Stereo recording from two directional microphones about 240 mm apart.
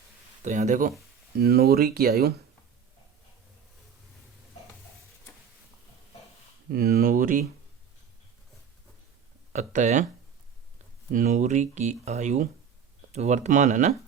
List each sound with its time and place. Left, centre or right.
0.4 s speech: right
6.7 s speech: right
9.5 s speech: right
11.1 s speech: right